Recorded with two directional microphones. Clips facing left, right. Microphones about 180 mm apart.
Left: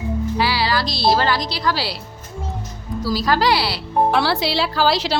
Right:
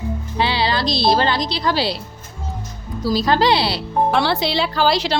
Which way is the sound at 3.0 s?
20° right (ahead or behind).